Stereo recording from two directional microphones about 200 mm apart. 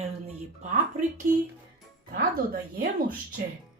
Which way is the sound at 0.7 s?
35° right (ahead or behind).